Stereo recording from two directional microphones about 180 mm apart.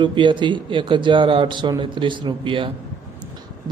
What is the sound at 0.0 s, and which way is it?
A man's voice, 25° right (ahead or behind).